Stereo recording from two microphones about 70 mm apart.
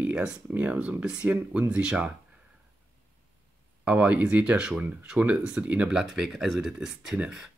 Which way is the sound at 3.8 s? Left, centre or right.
Centre.